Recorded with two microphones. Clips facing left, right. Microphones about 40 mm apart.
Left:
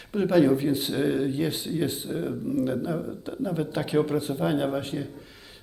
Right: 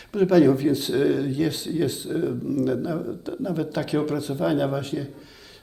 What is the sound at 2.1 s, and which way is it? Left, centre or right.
Speech, centre.